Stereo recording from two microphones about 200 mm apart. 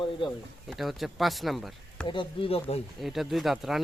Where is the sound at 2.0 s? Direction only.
25° left (ahead or behind).